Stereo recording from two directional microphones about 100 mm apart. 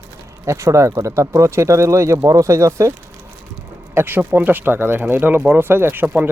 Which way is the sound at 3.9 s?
20° right (ahead or behind).